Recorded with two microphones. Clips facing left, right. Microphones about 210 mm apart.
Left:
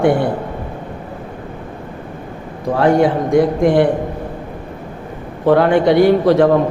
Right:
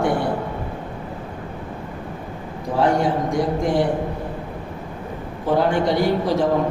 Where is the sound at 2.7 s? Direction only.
65° left (ahead or behind).